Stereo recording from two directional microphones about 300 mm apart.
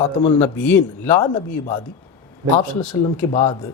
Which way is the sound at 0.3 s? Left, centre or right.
Centre.